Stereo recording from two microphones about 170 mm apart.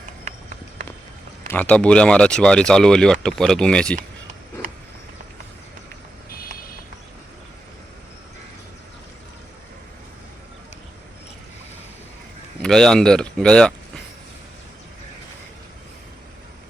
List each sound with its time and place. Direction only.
1.5 s speech: 10° left (ahead or behind)
6.3 s vehicle: 60° left (ahead or behind)
12.6 s speech: 5° left (ahead or behind)